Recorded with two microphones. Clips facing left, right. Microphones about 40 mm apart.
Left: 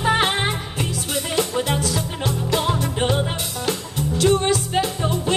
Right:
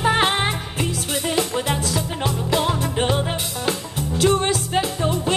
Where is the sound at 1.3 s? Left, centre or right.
Centre.